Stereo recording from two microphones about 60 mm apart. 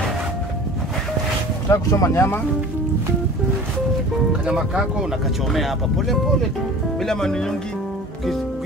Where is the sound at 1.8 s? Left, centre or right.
Left.